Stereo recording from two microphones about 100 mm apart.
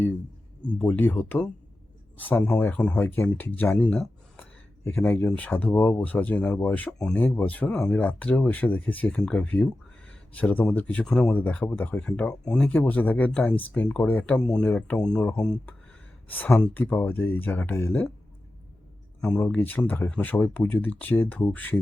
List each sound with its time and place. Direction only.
0.6 s speech: 15° left (ahead or behind)
16.7 s speech: 20° left (ahead or behind)
19.4 s speech: 20° left (ahead or behind)